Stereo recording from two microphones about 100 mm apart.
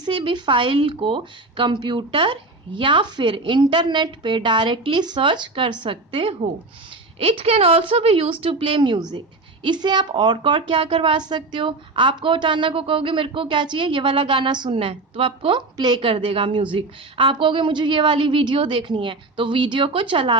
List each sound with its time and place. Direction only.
0.0 s a woman's voice: 55° right (ahead or behind)
7.2 s a woman's voice: 75° right (ahead or behind); by 20.3 s 60° right (ahead or behind)